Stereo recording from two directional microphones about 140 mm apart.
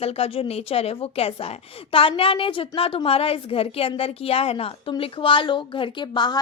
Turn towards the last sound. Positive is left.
turn(degrees=30)  # may be behind; listen again after turning